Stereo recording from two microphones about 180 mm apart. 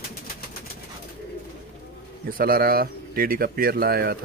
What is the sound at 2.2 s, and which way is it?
Speech, 55° right (ahead or behind).